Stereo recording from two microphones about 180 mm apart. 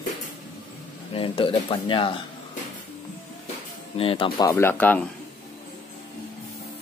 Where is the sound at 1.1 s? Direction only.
30° left (ahead or behind).